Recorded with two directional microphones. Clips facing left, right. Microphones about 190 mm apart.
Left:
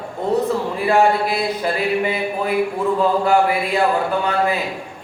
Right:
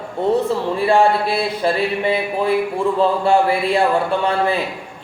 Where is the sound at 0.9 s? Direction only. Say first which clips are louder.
Even; 30° right (ahead or behind).